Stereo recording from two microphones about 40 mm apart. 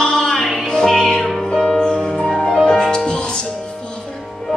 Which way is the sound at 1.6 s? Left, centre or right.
Centre.